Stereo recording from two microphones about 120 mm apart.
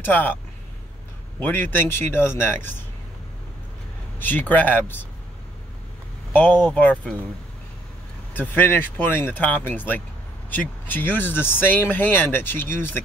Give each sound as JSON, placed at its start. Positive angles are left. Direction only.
{"t": 0.0, "sound": "speech", "side_deg": 15}
{"t": 1.4, "sound": "speech", "side_deg": 15}
{"t": 4.2, "sound": "speech", "side_deg": 15}
{"t": 6.6, "sound": "speech", "side_deg": 10}
{"t": 8.3, "sound": "speech", "side_deg": 15}